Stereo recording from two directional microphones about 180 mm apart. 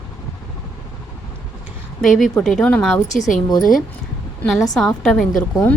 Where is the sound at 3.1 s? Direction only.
40° left (ahead or behind).